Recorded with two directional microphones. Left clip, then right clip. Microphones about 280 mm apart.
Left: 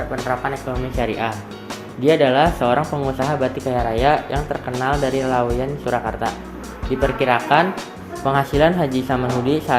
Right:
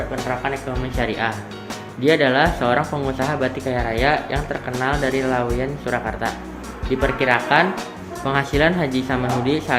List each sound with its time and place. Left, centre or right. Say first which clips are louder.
0.2 s speech: left 1 dB; centre